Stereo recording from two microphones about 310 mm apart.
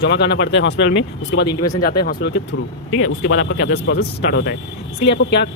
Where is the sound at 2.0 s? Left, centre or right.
Left.